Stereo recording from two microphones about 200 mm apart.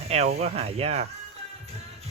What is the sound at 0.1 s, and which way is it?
Speech, 30° right (ahead or behind).